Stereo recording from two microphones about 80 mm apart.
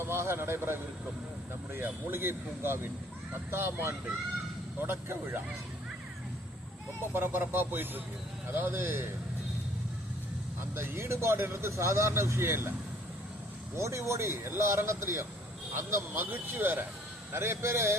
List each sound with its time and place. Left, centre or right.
0.0 s speech: right
7.1 s speech: right
10.8 s speech: right
13.7 s speech: right